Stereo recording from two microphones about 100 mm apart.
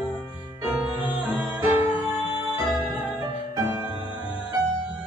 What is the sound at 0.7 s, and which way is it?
Music, 15° right (ahead or behind).